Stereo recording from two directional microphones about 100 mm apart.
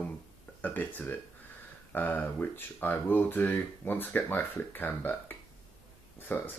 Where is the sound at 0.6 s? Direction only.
15° left (ahead or behind).